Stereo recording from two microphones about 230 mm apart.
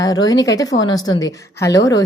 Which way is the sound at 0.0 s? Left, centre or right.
Centre.